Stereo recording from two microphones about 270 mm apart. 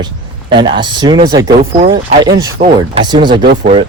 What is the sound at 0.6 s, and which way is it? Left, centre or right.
Speech, centre.